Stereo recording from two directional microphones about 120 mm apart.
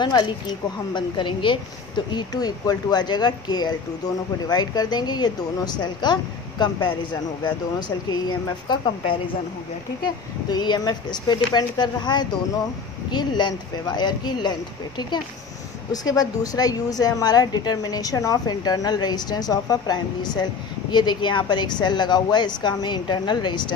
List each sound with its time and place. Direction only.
0.0 s a woman's voice: 35° left (ahead or behind)
8.1 s a woman's voice: 35° left (ahead or behind)
10.5 s a woman's voice: 35° left (ahead or behind)